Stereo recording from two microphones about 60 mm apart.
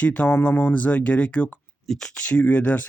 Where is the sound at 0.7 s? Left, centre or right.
Left.